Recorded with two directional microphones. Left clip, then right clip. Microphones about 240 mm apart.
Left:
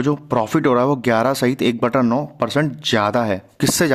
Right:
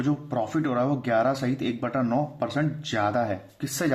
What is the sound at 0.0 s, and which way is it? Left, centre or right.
Speech, left.